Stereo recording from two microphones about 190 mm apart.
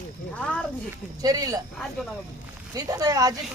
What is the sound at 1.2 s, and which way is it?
Speech, 20° right (ahead or behind).